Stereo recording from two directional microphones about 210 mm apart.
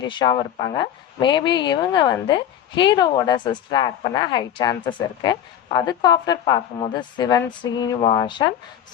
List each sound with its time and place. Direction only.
0.0 s a woman's voice: 20° left (ahead or behind)